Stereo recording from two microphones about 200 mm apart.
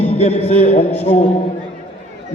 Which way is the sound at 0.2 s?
30° left (ahead or behind).